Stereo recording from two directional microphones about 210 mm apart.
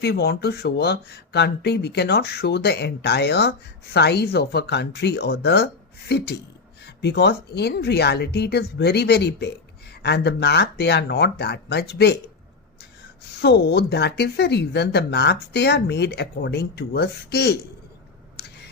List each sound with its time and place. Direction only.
0.0 s speech: 50° left (ahead or behind)
13.4 s speech: 50° left (ahead or behind)